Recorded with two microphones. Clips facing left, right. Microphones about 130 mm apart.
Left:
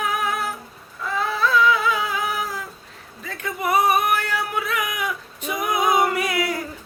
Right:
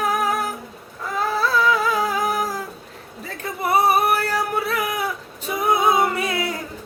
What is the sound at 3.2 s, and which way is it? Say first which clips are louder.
Music: even; 35° right (ahead or behind).